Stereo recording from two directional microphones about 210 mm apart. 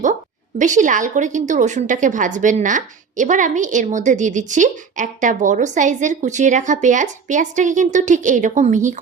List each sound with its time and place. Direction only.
0.6 s a woman's voice: 35° right (ahead or behind)